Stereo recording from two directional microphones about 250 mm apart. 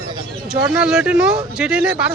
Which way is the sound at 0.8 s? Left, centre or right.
Centre.